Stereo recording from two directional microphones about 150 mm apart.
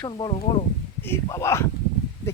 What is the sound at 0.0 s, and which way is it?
Speech, 30° left (ahead or behind).